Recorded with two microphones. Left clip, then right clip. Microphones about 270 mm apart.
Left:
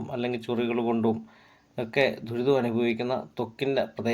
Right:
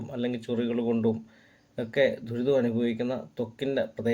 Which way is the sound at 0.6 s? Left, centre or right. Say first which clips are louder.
Left 1 dB; centre.